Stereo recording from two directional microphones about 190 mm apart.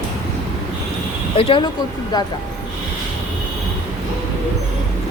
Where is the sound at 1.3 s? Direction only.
30° left (ahead or behind).